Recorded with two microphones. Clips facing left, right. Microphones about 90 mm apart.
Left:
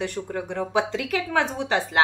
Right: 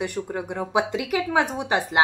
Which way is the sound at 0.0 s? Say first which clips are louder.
Right 1 dB; 15° right (ahead or behind).